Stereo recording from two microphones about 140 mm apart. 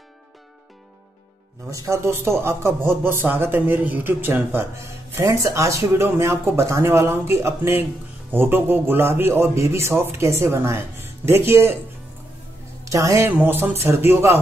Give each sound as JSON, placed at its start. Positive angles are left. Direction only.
{"t": 1.7, "sound": "a man's voice", "side_deg": -20}
{"t": 12.8, "sound": "speech", "side_deg": -25}